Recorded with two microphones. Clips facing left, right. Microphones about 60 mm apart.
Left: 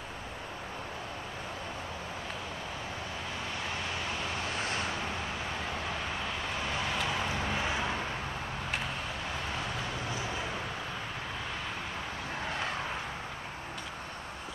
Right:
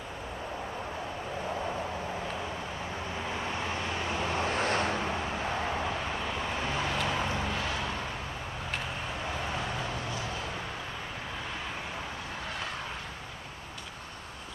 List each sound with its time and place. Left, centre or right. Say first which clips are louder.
4.0 s vehicle: right 4 dB; centre
4.6 s vehicle: right 5 dB; right
5.0 s a sound: right 4 dB; centre
6.9 s vehicle: right 2 dB; centre
7.5 s vehicle: left 1 dB; centre